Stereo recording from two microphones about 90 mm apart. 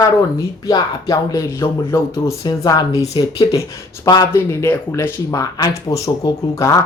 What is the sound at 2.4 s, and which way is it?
Speech, 45° left (ahead or behind).